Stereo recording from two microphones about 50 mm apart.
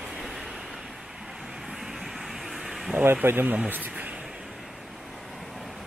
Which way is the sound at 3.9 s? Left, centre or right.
Right.